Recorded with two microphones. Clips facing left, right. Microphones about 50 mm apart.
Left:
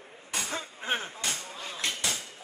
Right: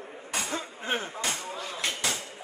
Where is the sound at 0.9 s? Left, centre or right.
Right.